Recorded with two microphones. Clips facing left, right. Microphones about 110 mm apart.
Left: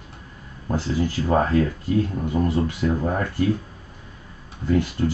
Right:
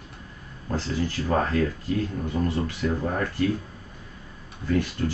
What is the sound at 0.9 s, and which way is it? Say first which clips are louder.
Speech: left 4 dB; 25° left (ahead or behind).